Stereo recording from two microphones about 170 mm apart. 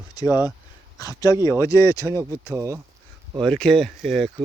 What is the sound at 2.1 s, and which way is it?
Speech, 15° right (ahead or behind).